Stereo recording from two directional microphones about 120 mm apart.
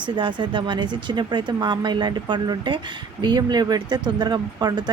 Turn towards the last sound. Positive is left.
turn(degrees=-35)  # may be behind; listen again after turning